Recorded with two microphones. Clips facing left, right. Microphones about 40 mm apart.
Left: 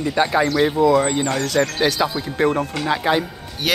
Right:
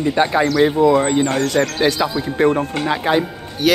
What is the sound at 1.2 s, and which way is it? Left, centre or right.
Speech, right.